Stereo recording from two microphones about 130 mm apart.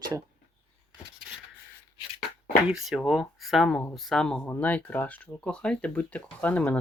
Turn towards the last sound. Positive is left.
turn(degrees=10)  # may be behind; listen again after turning